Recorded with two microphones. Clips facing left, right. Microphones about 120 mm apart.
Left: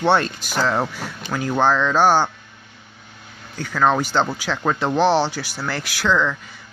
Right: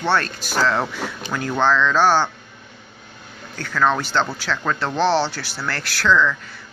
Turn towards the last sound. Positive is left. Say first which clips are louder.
# right 2 dB
turn(degrees=15)  # may be behind; listen again after turning